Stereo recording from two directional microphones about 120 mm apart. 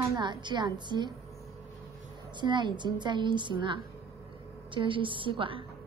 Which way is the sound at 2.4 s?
40° right (ahead or behind).